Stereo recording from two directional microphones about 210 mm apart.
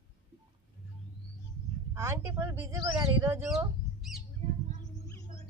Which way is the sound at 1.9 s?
10° right (ahead or behind).